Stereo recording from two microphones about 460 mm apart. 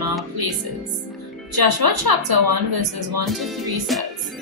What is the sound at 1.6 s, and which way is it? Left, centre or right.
A woman's voice, right.